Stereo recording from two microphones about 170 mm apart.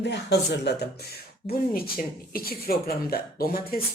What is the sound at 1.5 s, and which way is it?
Speech, 60° left (ahead or behind).